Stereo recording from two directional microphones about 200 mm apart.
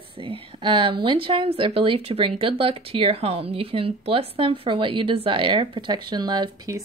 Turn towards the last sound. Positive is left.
turn(degrees=-20)  # may be behind; listen again after turning